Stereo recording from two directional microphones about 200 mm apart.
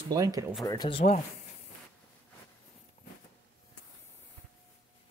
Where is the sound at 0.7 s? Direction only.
25° left (ahead or behind).